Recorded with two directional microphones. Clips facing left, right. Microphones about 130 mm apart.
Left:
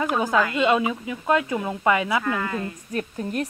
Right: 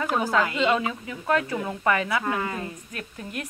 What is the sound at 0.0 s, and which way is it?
Speech, 15° left (ahead or behind).